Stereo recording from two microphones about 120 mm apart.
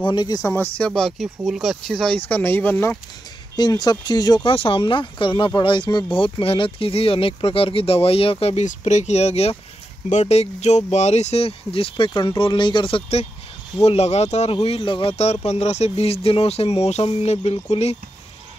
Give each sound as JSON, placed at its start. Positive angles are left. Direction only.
{"t": 0.0, "sound": "speech", "side_deg": 40}
{"t": 0.7, "sound": "speech", "side_deg": 5}
{"t": 2.1, "sound": "speech", "side_deg": 15}
{"t": 3.5, "sound": "speech", "side_deg": 35}